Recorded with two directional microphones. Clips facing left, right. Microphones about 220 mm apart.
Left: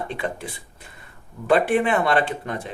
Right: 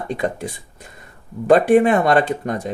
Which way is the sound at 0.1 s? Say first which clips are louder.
Right 6 dB; 45° right (ahead or behind).